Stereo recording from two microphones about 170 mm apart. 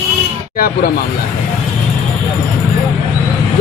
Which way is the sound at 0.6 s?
60° left (ahead or behind).